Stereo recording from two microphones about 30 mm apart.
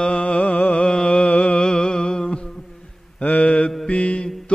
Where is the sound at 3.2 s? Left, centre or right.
Left.